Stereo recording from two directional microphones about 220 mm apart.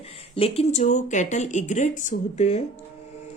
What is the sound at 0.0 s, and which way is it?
Speech, 25° left (ahead or behind).